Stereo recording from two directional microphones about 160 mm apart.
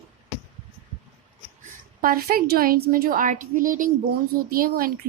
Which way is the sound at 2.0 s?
65° right (ahead or behind).